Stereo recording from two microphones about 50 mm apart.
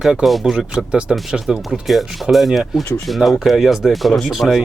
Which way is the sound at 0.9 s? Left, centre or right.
Centre.